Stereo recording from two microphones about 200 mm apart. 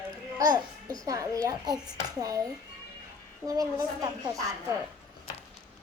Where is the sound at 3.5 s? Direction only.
15° right (ahead or behind).